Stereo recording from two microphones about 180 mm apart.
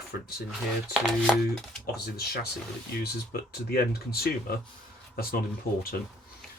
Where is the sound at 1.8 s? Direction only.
60° left (ahead or behind).